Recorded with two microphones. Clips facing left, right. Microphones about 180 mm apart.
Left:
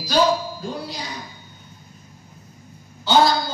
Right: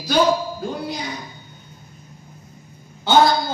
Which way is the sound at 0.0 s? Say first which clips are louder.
Right 1 dB; 55° right (ahead or behind).